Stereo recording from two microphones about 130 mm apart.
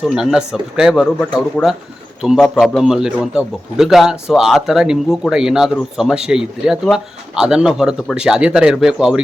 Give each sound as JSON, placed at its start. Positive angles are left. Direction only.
{"t": 0.0, "sound": "a man's voice", "side_deg": 0}
{"t": 1.6, "sound": "speech", "side_deg": 15}
{"t": 2.2, "sound": "a man's voice", "side_deg": 0}